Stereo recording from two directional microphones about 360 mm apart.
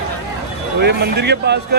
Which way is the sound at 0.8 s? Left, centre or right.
Right.